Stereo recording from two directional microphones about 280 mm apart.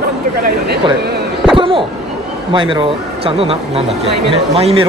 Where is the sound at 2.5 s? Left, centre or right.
Centre.